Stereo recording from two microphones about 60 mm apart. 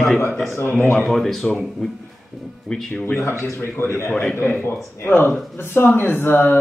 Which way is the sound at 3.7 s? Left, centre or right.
Left.